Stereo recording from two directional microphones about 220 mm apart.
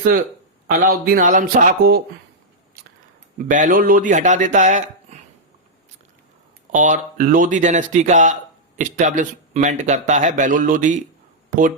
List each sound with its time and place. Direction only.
0.8 s speech: 40° right (ahead or behind)
3.3 s speech: 35° right (ahead or behind)
6.7 s speech: 35° right (ahead or behind)